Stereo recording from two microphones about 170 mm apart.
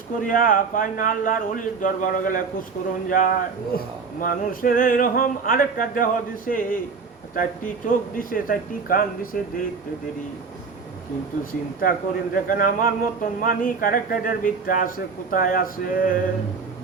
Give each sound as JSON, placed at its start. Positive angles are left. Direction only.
{"t": 0.2, "sound": "a man's voice", "side_deg": 55}
{"t": 11.8, "sound": "a man's voice", "side_deg": 55}